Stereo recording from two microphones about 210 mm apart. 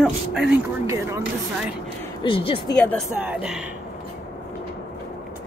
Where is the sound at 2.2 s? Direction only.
25° left (ahead or behind).